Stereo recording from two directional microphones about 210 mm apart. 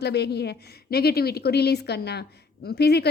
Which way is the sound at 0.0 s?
50° left (ahead or behind).